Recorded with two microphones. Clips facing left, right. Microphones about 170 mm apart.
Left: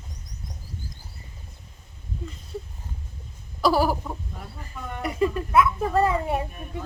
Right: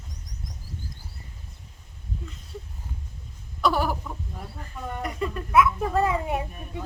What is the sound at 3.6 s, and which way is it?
Chicken, 35° left (ahead or behind).